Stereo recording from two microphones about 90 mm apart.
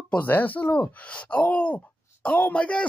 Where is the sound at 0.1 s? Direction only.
20° left (ahead or behind).